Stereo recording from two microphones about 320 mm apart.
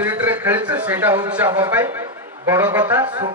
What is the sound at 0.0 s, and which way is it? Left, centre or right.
A man's voice, centre.